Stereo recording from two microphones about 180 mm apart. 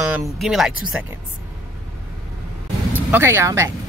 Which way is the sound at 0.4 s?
Centre (ahead or behind).